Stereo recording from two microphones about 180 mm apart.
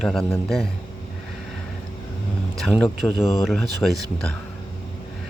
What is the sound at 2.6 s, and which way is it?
Speech, 5° left (ahead or behind).